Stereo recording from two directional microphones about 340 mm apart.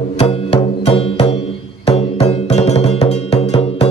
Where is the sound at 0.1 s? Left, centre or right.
Centre.